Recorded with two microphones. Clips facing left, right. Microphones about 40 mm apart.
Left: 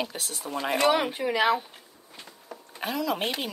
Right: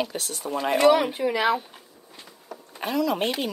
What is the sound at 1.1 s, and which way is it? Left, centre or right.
Speech, left.